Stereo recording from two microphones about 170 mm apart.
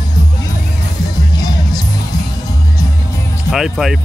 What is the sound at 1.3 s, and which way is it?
Music, 25° left (ahead or behind).